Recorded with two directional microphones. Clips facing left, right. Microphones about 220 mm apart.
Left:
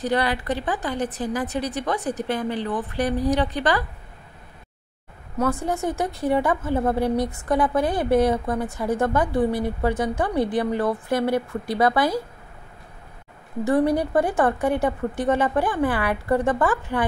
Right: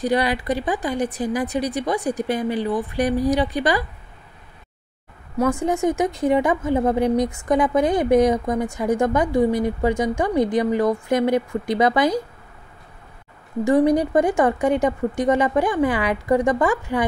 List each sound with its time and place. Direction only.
0.0 s a woman's voice: 15° right (ahead or behind)
5.4 s a woman's voice: 15° right (ahead or behind)
13.7 s a woman's voice: 15° right (ahead or behind)